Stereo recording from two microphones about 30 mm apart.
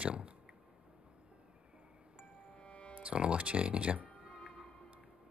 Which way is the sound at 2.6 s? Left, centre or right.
Left.